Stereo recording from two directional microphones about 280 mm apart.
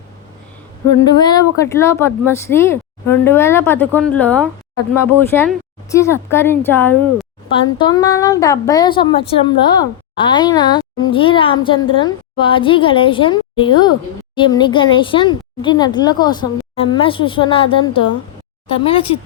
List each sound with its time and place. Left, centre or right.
1.0 s speech: centre